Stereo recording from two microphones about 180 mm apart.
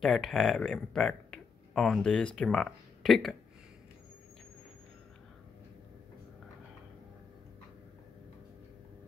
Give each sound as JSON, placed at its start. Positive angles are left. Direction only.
{"t": 0.0, "sound": "speech", "side_deg": 0}